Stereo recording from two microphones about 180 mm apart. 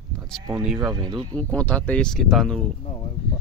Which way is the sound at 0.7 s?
20° right (ahead or behind).